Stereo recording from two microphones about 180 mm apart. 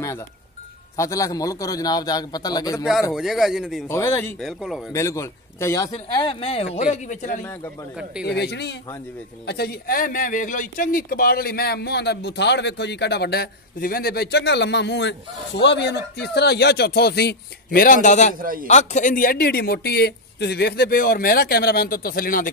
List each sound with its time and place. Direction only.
0.9 s a man's voice: 15° left (ahead or behind)
2.8 s a man's voice: 5° right (ahead or behind)
3.8 s speech: 15° left (ahead or behind)
4.4 s a man's voice: centre (ahead or behind)
4.9 s a man's voice: 15° left (ahead or behind); by 7.3 s 45° left (ahead or behind)
8.0 s a man's voice: 5° right (ahead or behind)
8.3 s a man's voice: 65° left (ahead or behind); by 18.3 s 40° left (ahead or behind)
18.4 s a man's voice: 50° right (ahead or behind)
18.7 s a man's voice: 40° left (ahead or behind)